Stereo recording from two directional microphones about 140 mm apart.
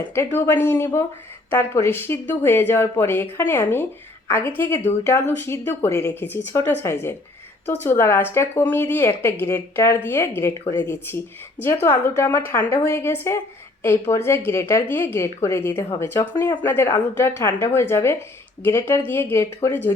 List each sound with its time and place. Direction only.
0.3 s speech: 15° left (ahead or behind)